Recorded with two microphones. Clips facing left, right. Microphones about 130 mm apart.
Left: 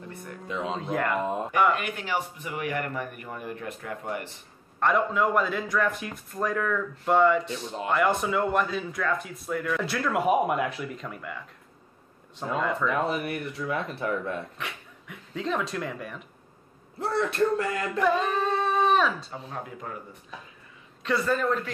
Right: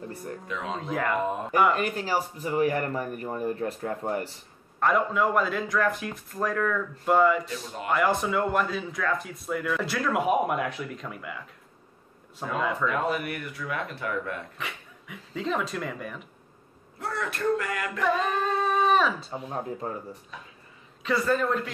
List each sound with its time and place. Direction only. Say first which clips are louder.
0.1 s speech: right 4 dB; 35° right (ahead or behind)
0.5 s speech: left 3 dB; 25° left (ahead or behind)
0.7 s speech: right 1 dB; centre (ahead or behind)
1.8 s speech: right 3 dB; 35° right (ahead or behind)
4.7 s speech: even; centre (ahead or behind)
7.4 s speech: left 2 dB; 30° left (ahead or behind)
7.9 s speech: even; centre (ahead or behind)
12.8 s speech: even; 25° left (ahead or behind)
14.6 s speech: even; centre (ahead or behind)
17.0 s speech: left 4 dB; 30° left (ahead or behind)
18.0 s speech: left 1 dB; centre (ahead or behind)
19.3 s speech: right 4 dB; 30° right (ahead or behind)
21.0 s speech: right 1 dB; centre (ahead or behind)